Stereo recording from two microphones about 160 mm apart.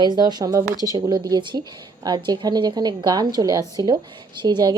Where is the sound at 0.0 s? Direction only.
25° right (ahead or behind).